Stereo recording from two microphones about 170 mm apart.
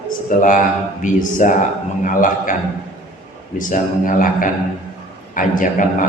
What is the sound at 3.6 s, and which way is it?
A man's voice, 50° left (ahead or behind).